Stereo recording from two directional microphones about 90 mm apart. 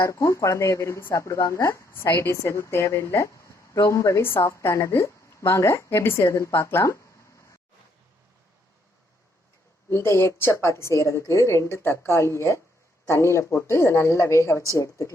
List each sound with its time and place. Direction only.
0.0 s a woman's voice: 35° left (ahead or behind)
9.9 s a woman's voice: 25° left (ahead or behind)